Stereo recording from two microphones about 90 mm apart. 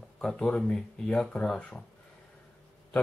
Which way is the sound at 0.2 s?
10° left (ahead or behind).